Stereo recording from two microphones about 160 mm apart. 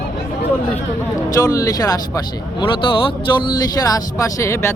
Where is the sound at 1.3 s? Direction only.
20° left (ahead or behind).